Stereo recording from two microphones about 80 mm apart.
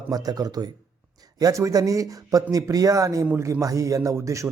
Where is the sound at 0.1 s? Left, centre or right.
Right.